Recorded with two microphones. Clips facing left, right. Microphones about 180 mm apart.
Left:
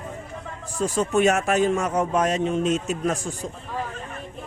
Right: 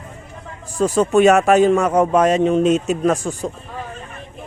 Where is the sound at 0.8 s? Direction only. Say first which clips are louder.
Right 7 dB; 70° right (ahead or behind).